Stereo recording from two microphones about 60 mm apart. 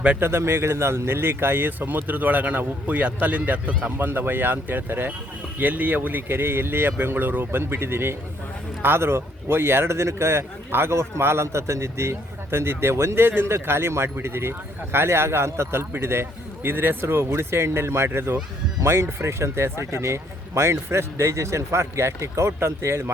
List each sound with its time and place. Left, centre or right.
0.2 s speech: right
3.9 s speech: right